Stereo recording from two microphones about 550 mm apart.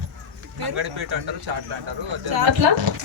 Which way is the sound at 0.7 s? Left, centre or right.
Right.